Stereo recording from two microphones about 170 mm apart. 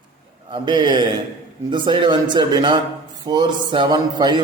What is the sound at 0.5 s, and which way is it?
A man's voice, 25° right (ahead or behind).